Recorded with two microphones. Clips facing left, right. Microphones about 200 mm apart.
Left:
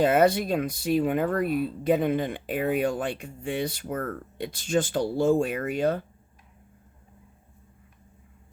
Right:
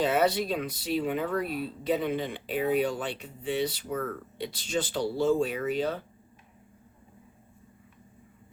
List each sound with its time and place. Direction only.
0.0 s speech: 50° left (ahead or behind)